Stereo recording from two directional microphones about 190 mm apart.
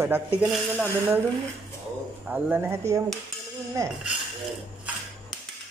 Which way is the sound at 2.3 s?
5° right (ahead or behind).